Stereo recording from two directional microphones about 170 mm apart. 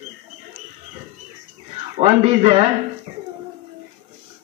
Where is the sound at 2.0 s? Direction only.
35° right (ahead or behind).